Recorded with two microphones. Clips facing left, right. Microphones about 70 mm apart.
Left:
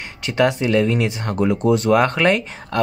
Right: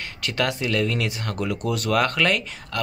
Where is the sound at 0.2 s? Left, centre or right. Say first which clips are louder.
Left 7 dB; left.